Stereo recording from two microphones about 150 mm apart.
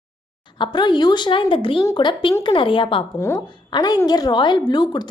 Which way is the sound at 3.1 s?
15° left (ahead or behind).